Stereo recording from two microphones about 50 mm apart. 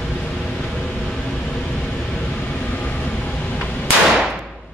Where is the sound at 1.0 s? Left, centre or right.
Centre.